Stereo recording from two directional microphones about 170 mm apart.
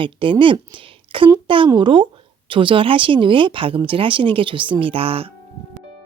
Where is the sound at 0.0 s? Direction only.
30° right (ahead or behind).